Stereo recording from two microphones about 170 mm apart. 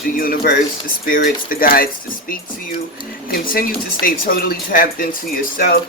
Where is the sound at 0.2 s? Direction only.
60° left (ahead or behind).